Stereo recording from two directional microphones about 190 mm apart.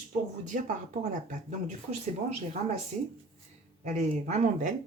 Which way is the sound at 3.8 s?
40° right (ahead or behind).